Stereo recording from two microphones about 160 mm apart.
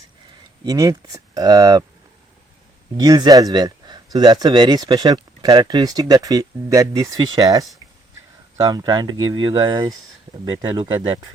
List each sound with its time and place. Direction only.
0.6 s speech: 25° right (ahead or behind)
3.0 s speech: 25° right (ahead or behind)
8.6 s speech: 25° right (ahead or behind)